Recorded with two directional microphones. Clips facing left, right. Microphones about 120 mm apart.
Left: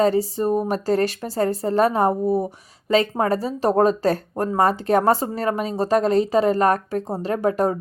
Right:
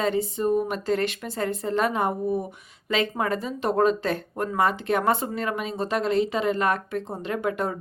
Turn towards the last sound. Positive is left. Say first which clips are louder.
# left 6 dB
turn(degrees=35)  # may be behind; listen again after turning